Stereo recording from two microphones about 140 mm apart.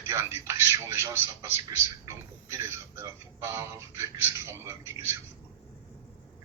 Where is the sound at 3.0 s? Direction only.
20° right (ahead or behind).